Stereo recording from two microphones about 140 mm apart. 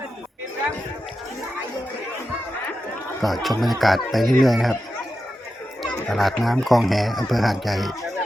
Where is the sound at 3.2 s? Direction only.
Centre (ahead or behind).